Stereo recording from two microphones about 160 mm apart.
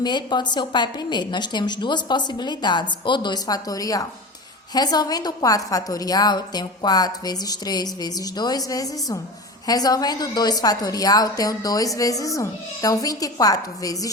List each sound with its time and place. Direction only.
0.0 s a woman's voice: 25° left (ahead or behind)